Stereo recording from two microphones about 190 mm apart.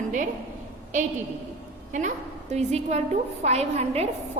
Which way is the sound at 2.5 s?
35° right (ahead or behind).